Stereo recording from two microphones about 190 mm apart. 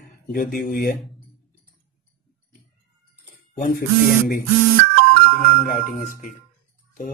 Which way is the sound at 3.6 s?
55° left (ahead or behind).